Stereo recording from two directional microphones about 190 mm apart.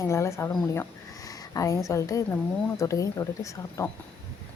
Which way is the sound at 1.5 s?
15° left (ahead or behind).